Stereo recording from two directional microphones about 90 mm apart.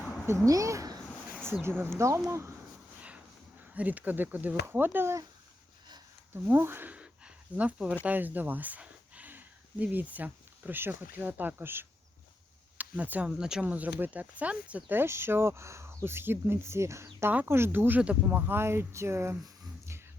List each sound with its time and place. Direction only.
0.4 s speech: 40° right (ahead or behind)
1.6 s speech: 25° right (ahead or behind)
3.8 s speech: 20° right (ahead or behind)
6.3 s speech: 25° right (ahead or behind)